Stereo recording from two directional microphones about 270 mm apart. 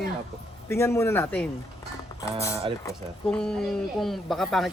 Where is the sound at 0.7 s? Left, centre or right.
Centre.